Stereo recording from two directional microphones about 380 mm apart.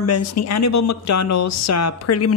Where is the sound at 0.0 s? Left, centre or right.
Left.